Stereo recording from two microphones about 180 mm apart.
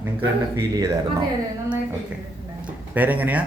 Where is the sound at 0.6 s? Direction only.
20° right (ahead or behind).